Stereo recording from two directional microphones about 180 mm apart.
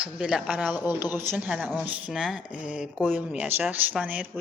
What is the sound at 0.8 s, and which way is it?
Speech, 10° right (ahead or behind).